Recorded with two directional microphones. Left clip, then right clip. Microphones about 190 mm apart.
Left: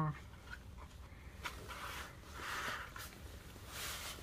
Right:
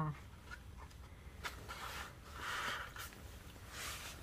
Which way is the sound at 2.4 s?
10° left (ahead or behind).